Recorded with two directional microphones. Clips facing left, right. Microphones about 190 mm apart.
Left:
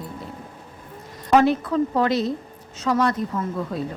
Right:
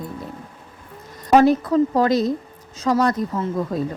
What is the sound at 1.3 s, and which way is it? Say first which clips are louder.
A woman's voice: right 3 dB; 40° right (ahead or behind).